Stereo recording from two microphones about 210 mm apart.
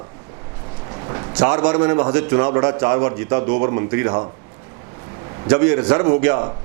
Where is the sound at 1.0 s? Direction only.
25° right (ahead or behind).